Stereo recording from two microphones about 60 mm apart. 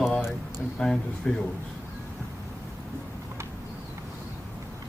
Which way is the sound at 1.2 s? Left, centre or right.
Centre.